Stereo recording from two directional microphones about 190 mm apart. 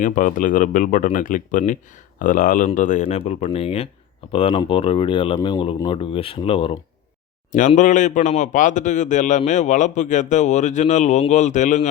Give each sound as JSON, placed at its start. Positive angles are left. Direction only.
{"t": 0.0, "sound": "speech", "side_deg": 45}
{"t": 7.7, "sound": "speech", "side_deg": 40}